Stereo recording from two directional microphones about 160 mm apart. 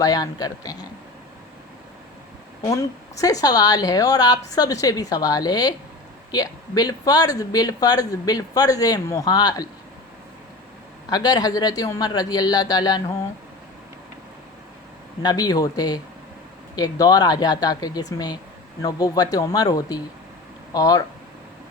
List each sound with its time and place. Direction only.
0.0 s speech: 25° left (ahead or behind)
2.6 s speech: 20° left (ahead or behind)
11.1 s speech: 25° left (ahead or behind)
15.2 s speech: 25° left (ahead or behind)